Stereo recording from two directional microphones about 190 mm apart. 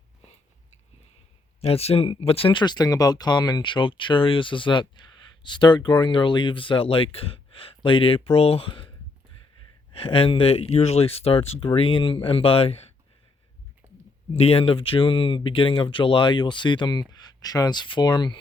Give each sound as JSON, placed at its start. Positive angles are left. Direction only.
{"t": 1.6, "sound": "speech", "side_deg": 30}
{"t": 9.9, "sound": "speech", "side_deg": 30}
{"t": 13.8, "sound": "clicking", "side_deg": -10}
{"t": 14.3, "sound": "speech", "side_deg": 30}